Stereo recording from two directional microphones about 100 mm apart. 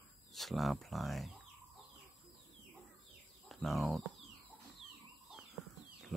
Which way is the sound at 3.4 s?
Centre (ahead or behind).